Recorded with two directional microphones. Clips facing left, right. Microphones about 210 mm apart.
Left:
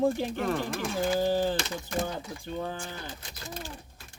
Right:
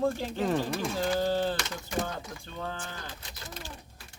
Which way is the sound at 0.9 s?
15° left (ahead or behind).